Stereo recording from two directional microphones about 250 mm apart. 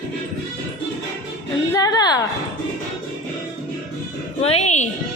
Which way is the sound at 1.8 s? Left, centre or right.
Centre.